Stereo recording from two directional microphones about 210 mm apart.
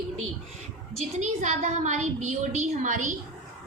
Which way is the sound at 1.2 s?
35° right (ahead or behind).